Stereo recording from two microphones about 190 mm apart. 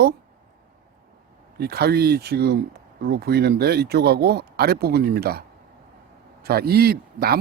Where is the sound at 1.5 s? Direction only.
55° right (ahead or behind).